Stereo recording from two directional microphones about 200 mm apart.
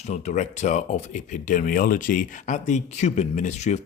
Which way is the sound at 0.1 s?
35° left (ahead or behind).